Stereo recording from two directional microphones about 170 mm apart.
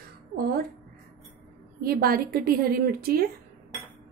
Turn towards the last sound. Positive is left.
turn(degrees=-60)  # may be behind; listen again after turning